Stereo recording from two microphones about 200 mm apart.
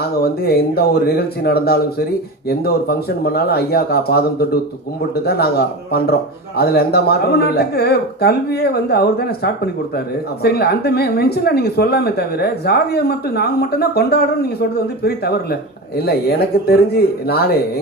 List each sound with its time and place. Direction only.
0.0 s speech: 50° left (ahead or behind)